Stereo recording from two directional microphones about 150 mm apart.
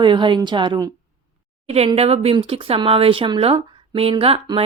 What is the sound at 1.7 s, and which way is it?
Speech, 45° right (ahead or behind).